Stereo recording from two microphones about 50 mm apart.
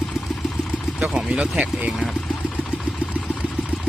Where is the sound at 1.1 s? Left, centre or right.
Centre.